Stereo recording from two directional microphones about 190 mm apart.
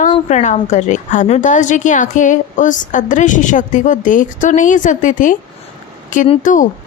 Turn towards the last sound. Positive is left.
turn(degrees=45)  # may be behind; listen again after turning